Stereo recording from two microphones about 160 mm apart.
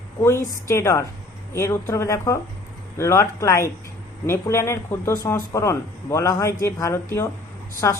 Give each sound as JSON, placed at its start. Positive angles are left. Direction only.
{"t": 0.2, "sound": "a woman's voice", "side_deg": 15}